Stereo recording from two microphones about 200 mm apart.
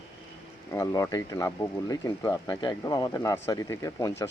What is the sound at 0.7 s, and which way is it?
Speech, 15° left (ahead or behind).